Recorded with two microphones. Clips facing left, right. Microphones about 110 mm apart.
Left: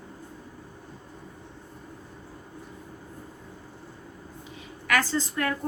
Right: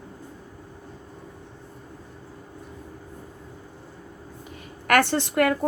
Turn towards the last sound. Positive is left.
turn(degrees=-75)  # may be behind; listen again after turning